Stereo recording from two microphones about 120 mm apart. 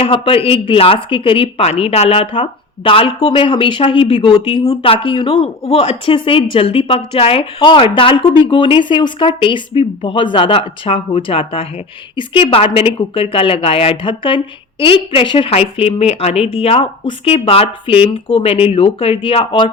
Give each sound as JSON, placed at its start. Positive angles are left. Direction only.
{"t": 0.0, "sound": "a woman's voice", "side_deg": 50}
{"t": 4.8, "sound": "speech", "side_deg": 45}
{"t": 5.6, "sound": "speech", "side_deg": 60}
{"t": 6.1, "sound": "a woman's voice", "side_deg": 45}